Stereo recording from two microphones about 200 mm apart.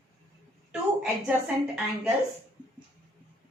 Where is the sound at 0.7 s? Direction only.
5° right (ahead or behind).